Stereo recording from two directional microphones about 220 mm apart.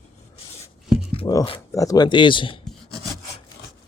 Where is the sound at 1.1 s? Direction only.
20° left (ahead or behind).